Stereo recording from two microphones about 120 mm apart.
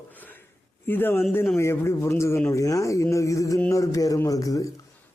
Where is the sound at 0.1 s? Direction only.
15° left (ahead or behind).